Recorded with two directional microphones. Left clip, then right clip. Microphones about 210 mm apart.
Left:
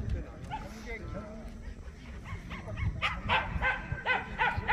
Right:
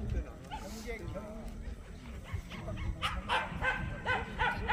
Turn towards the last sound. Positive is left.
turn(degrees=30)  # may be behind; listen again after turning